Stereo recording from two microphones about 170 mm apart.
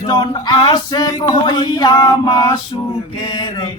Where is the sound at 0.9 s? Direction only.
20° left (ahead or behind).